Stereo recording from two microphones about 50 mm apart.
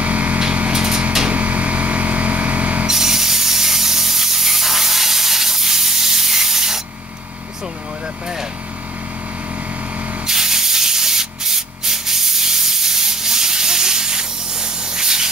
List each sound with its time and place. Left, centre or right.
0.0 s a sound: right
2.9 s spray: centre
10.2 s sanding: centre